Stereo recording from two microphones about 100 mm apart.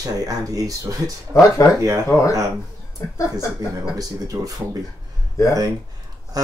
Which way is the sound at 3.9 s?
35° right (ahead or behind).